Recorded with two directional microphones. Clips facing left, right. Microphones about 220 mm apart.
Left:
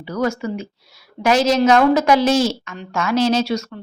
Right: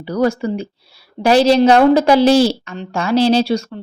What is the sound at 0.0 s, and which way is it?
A woman's voice, 35° right (ahead or behind).